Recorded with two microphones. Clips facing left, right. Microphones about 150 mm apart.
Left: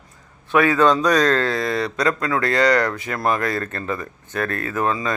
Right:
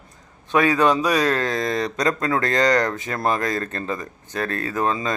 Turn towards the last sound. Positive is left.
turn(degrees=-25)  # may be behind; listen again after turning